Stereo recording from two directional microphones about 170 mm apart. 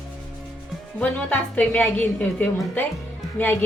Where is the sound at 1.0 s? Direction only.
10° left (ahead or behind).